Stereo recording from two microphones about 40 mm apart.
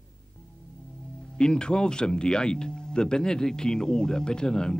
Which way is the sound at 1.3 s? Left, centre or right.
Left.